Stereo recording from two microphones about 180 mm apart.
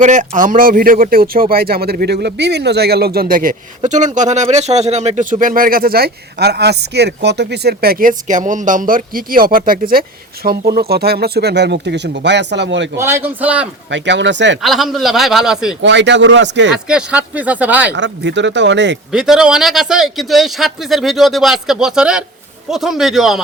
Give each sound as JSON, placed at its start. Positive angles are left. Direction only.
{"t": 0.0, "sound": "speech", "side_deg": -45}
{"t": 3.8, "sound": "speech", "side_deg": -40}
{"t": 13.0, "sound": "speech", "side_deg": -15}
{"t": 13.9, "sound": "speech", "side_deg": -85}
{"t": 14.6, "sound": "speech", "side_deg": 0}
{"t": 15.8, "sound": "speech", "side_deg": -80}
{"t": 16.9, "sound": "speech", "side_deg": -5}
{"t": 17.9, "sound": "speech", "side_deg": -80}
{"t": 19.1, "sound": "speech", "side_deg": -5}